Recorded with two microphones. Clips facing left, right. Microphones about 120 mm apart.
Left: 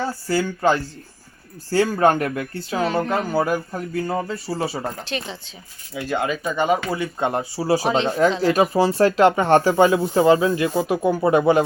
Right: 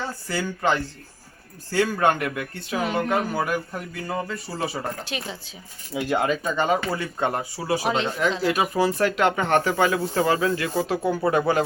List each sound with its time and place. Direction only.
0.3 s speech: 35° left (ahead or behind)
2.8 s speech: 15° right (ahead or behind)
3.3 s speech: 30° left (ahead or behind)
5.0 s speech: 10° right (ahead or behind)
6.1 s speech: 5° left (ahead or behind); by 11.6 s 20° left (ahead or behind)